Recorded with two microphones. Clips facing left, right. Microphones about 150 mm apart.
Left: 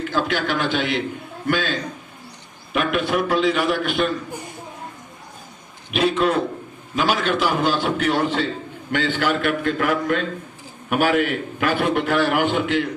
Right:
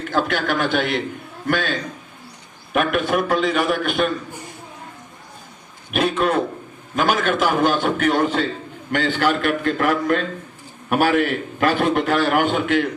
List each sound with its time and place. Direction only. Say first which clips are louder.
0.1 s a man's voice: right 3 dB; 50° right (ahead or behind)
5.9 s a man's voice: even; 50° right (ahead or behind)